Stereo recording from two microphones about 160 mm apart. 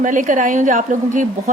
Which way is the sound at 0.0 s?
55° right (ahead or behind).